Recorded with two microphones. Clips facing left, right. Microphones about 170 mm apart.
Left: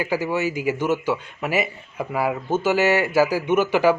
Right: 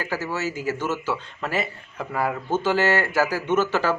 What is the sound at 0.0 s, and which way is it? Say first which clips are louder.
A man's voice: left 5 dB; 15° left (ahead or behind).